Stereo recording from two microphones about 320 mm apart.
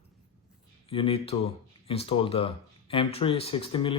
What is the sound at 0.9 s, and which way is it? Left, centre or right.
Speech, centre.